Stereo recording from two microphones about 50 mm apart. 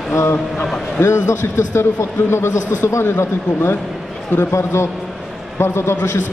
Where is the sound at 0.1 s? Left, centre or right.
Left.